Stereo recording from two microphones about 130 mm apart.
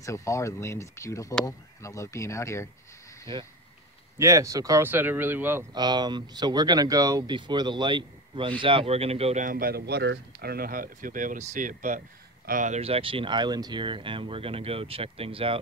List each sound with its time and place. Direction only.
0.0 s speech: 25° left (ahead or behind)
4.2 s speech: 25° right (ahead or behind)
4.8 s speech: 15° right (ahead or behind)
5.8 s speech: 30° right (ahead or behind); by 9.4 s 50° right (ahead or behind)
9.4 s speech: 90° right
10.7 s speech: 90° right; by 15.6 s 45° right (ahead or behind)